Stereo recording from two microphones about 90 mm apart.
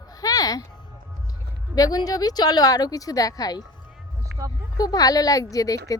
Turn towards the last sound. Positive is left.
turn(degrees=40)  # may be behind; listen again after turning